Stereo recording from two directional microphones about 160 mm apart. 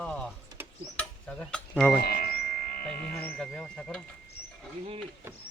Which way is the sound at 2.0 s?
70° left (ahead or behind).